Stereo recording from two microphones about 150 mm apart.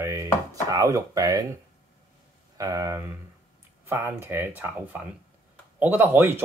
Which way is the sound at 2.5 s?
25° right (ahead or behind).